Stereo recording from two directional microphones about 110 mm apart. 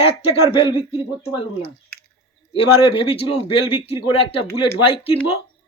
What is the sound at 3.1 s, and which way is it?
Speech, 55° left (ahead or behind).